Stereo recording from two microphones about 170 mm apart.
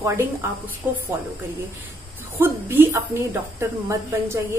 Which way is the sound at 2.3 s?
10° right (ahead or behind).